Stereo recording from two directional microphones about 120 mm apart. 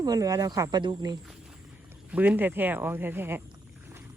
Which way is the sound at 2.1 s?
15° right (ahead or behind).